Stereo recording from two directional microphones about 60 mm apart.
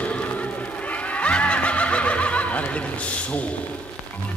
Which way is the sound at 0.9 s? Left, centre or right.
Left.